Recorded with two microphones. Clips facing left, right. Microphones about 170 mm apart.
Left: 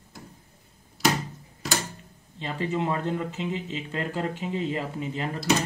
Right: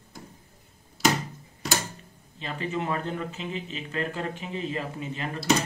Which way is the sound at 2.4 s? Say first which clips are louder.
Left 3 dB; 25° left (ahead or behind).